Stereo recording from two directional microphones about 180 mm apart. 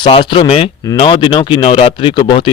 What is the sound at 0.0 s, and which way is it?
Speech, 30° left (ahead or behind).